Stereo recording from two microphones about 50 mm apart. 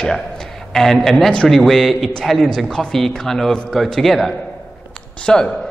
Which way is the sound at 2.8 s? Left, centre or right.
Centre.